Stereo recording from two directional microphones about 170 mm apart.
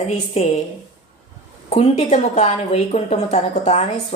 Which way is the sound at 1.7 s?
40° left (ahead or behind).